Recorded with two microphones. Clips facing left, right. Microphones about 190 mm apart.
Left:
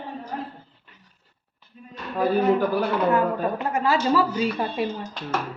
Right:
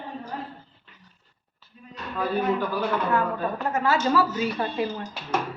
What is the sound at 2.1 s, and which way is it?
Speech, 40° left (ahead or behind).